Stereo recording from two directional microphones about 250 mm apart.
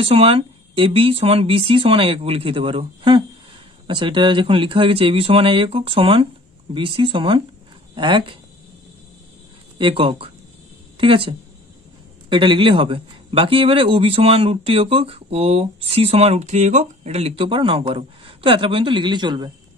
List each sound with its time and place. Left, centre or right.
0.0 s a man's voice: right
9.8 s a man's voice: right